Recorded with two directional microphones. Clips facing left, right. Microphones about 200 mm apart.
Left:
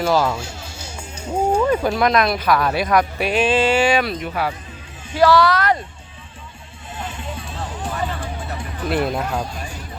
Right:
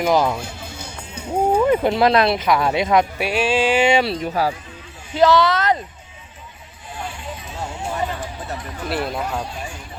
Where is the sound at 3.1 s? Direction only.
10° right (ahead or behind); by 4.5 s 35° right (ahead or behind).